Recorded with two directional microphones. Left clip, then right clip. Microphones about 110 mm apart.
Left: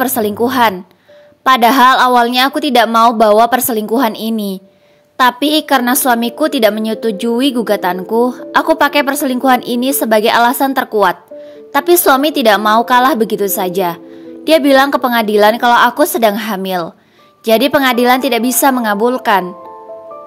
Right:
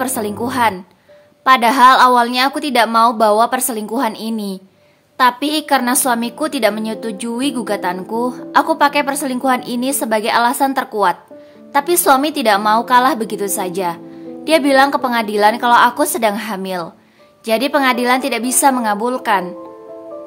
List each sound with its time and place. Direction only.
0.0 s a woman's voice: 45° left (ahead or behind)